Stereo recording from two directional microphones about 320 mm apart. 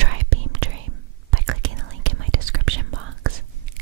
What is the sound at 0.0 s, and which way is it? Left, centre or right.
Whispering, right.